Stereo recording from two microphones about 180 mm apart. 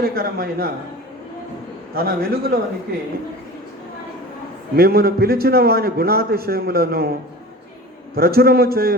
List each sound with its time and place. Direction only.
0.0 s a man's voice: 55° right (ahead or behind)
2.0 s a man's voice: 55° right (ahead or behind)
4.8 s a man's voice: 55° right (ahead or behind)
8.1 s a man's voice: 55° right (ahead or behind)